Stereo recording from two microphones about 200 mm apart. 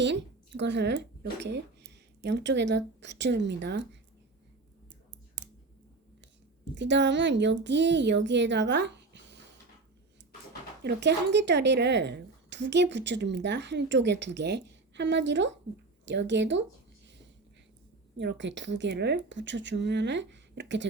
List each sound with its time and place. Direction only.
0.0 s speech: 60° right (ahead or behind)
6.7 s speech: 60° right (ahead or behind)
10.8 s speech: 60° right (ahead or behind)
18.2 s speech: 60° right (ahead or behind)